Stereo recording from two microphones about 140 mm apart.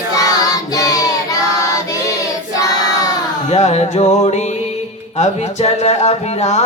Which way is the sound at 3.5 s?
50° left (ahead or behind).